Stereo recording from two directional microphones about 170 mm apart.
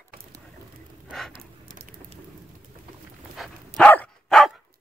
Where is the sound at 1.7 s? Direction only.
55° right (ahead or behind).